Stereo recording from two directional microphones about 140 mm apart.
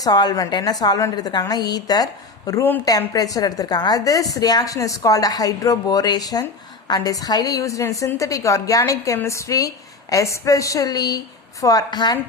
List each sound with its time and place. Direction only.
0.0 s a woman's voice: 30° left (ahead or behind)
2.5 s a woman's voice: 15° left (ahead or behind)